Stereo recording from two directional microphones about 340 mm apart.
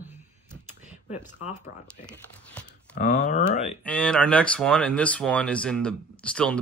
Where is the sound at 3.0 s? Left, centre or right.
Left.